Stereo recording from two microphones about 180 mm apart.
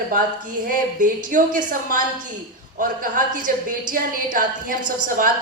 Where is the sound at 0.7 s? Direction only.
50° right (ahead or behind).